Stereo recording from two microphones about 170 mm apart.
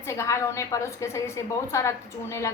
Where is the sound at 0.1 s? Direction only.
15° left (ahead or behind).